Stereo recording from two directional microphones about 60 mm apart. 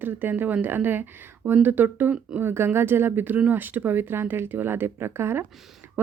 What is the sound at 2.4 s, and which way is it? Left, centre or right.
A woman's voice, right.